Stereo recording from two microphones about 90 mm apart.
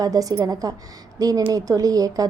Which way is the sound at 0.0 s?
40° right (ahead or behind).